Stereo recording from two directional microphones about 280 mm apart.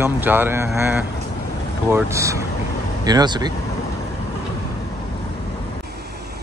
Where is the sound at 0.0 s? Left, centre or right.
Centre.